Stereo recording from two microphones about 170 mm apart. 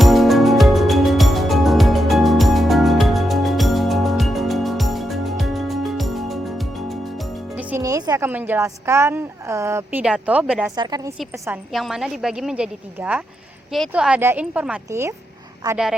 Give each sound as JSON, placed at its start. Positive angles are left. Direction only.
{"t": 0.0, "sound": "music", "side_deg": 0}
{"t": 7.8, "sound": "a woman's voice", "side_deg": -20}
{"t": 10.8, "sound": "speech", "side_deg": -25}
{"t": 11.3, "sound": "a woman's voice", "side_deg": -10}